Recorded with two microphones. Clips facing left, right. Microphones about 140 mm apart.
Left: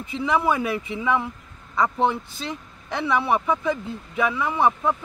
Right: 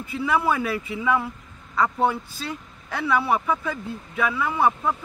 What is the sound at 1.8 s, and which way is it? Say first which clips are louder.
Speech: even; 20° left (ahead or behind).